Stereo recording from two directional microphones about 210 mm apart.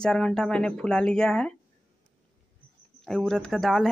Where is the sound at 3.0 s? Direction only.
Centre (ahead or behind).